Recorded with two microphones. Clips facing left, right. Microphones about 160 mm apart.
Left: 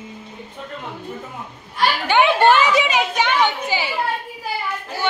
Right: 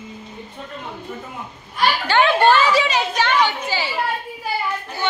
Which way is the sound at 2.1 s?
15° left (ahead or behind).